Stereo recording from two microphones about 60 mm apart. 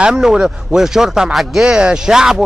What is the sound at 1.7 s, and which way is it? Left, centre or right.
Speech, centre.